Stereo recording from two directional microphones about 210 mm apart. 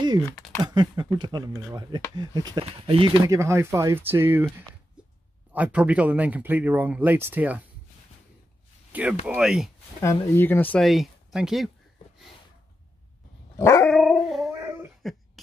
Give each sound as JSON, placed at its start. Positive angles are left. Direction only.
{"t": 0.7, "sound": "speech", "side_deg": -20}
{"t": 5.0, "sound": "a sound", "side_deg": -5}
{"t": 5.5, "sound": "speech", "side_deg": -5}
{"t": 9.2, "sound": "speech", "side_deg": -5}
{"t": 10.0, "sound": "speech", "side_deg": 10}
{"t": 13.6, "sound": "dog", "side_deg": 15}
{"t": 13.8, "sound": "dog", "side_deg": 0}
{"t": 14.5, "sound": "a sound", "side_deg": -15}